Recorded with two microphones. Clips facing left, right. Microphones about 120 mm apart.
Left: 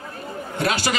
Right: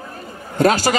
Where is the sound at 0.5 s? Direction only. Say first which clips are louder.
Right 8 dB; 40° right (ahead or behind).